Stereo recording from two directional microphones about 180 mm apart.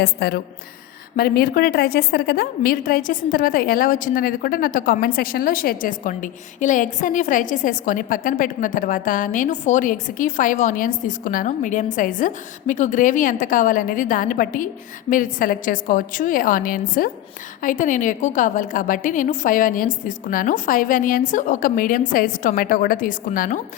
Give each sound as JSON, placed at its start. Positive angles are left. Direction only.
{"t": 0.0, "sound": "a woman's voice", "side_deg": 65}